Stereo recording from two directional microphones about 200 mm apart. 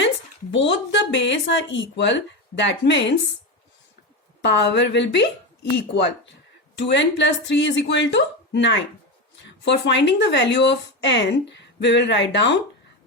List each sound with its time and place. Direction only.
0.5 s speech: 65° left (ahead or behind)
4.4 s speech: 60° left (ahead or behind)